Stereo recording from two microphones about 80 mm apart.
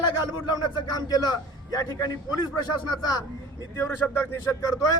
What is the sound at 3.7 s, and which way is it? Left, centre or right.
Speech, left.